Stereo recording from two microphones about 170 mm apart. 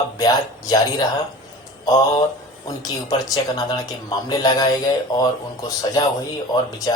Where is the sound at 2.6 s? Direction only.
25° left (ahead or behind).